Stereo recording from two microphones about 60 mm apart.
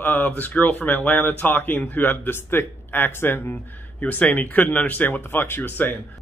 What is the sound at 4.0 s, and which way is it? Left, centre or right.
A man's voice, left.